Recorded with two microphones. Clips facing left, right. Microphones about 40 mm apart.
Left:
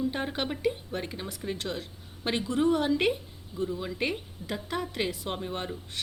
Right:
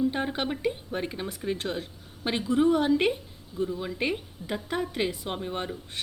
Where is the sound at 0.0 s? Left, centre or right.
Centre.